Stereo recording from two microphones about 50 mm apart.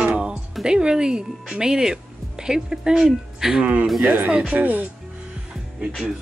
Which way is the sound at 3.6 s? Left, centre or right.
Right.